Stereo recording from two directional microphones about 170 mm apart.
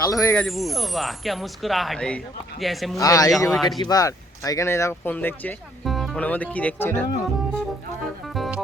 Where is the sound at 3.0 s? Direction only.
20° left (ahead or behind).